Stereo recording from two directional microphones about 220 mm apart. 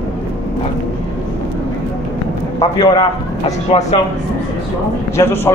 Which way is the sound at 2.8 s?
25° left (ahead or behind).